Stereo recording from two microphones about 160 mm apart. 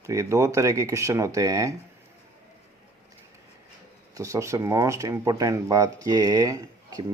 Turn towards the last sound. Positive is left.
turn(degrees=-20)  # may be behind; listen again after turning